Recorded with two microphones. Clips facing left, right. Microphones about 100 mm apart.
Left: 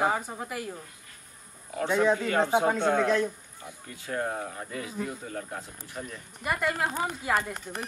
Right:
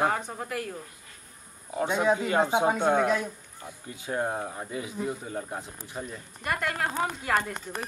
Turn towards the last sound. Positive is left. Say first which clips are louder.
# right 1 dB
turn(degrees=5)  # may be behind; listen again after turning